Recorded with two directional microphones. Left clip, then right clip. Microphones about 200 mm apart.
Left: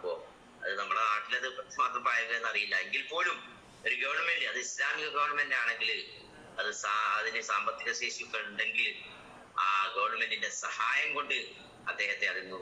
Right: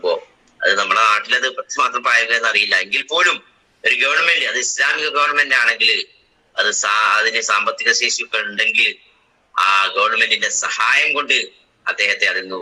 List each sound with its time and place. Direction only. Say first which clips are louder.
0.6 s a man's voice: right 17 dB; 55° right (ahead or behind)